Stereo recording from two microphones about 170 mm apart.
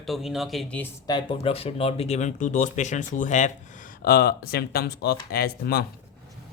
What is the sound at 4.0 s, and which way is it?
Speech, 65° left (ahead or behind).